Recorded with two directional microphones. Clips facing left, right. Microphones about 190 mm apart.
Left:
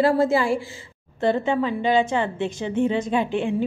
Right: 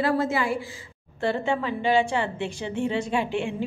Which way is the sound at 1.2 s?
20° left (ahead or behind).